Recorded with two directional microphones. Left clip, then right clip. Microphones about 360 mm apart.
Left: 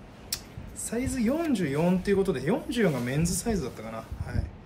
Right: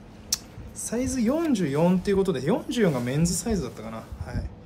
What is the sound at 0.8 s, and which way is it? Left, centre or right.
Speech, centre.